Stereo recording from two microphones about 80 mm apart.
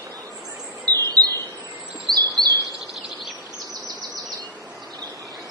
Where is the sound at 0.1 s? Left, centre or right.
Right.